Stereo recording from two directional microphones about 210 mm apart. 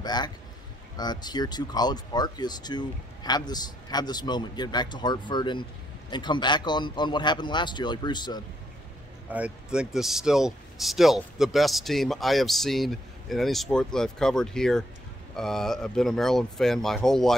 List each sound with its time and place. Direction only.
0.0 s speech: 20° left (ahead or behind)
9.3 s speech: 5° right (ahead or behind)